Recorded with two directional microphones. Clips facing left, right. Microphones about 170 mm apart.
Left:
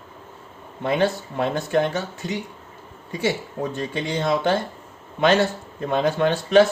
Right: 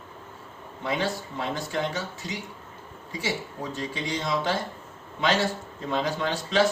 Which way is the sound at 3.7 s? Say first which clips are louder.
Left 2 dB; 60° left (ahead or behind).